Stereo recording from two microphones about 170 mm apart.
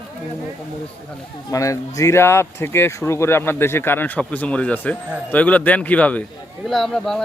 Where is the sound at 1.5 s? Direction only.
20° left (ahead or behind).